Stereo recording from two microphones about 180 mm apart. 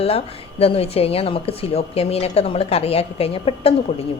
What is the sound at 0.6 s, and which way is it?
Speech, 35° left (ahead or behind).